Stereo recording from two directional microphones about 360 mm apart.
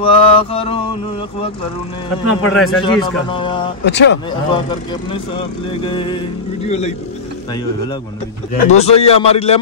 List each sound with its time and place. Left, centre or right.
0.0 s a man's voice: centre
2.5 s a man's voice: centre
2.8 s a man's voice: centre
3.8 s speech: left
5.8 s a man's voice: centre
8.6 s a man's voice: centre